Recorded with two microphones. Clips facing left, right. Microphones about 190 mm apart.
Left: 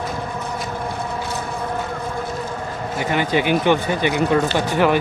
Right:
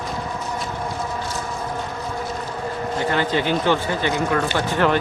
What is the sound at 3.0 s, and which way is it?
Speech, 15° left (ahead or behind).